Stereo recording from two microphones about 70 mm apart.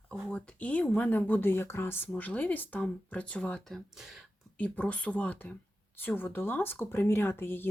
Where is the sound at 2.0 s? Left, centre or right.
Left.